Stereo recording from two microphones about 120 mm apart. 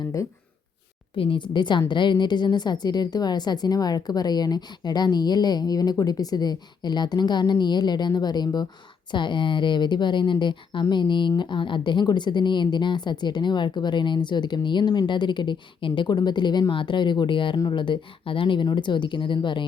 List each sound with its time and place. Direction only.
1.1 s a woman's voice: 45° left (ahead or behind)